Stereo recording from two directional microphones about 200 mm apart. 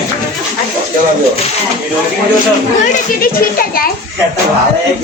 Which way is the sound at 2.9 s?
45° left (ahead or behind).